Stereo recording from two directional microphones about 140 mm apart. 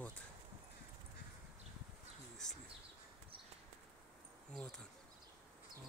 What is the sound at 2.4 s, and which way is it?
Speech, 5° left (ahead or behind).